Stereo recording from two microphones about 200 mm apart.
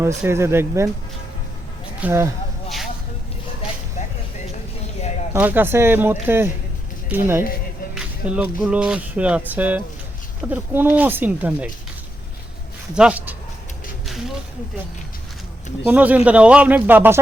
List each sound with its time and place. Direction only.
0.2 s speech: 15° right (ahead or behind)
2.0 s speech: 10° right (ahead or behind)
5.3 s speech: 10° right (ahead or behind)
12.9 s speech: 5° right (ahead or behind)
14.0 s a sound: centre (ahead or behind)
15.9 s speech: 5° right (ahead or behind)